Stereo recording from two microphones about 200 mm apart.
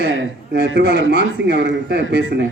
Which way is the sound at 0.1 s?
65° right (ahead or behind).